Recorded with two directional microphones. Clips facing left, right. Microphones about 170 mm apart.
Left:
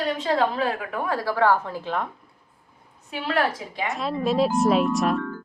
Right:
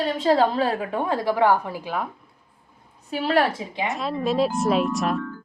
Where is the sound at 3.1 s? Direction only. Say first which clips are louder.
Right 3 dB; 35° right (ahead or behind).